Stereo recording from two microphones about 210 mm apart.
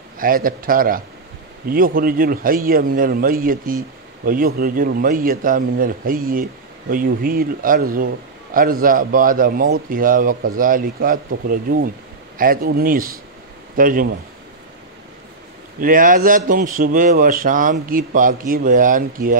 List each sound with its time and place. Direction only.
0.2 s a man's voice: 40° right (ahead or behind)
15.8 s speech: 40° right (ahead or behind)